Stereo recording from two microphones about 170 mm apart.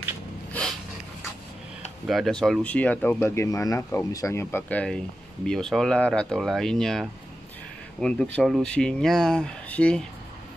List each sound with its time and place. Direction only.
0.5 s snort: 5° left (ahead or behind)
2.0 s speech: centre (ahead or behind)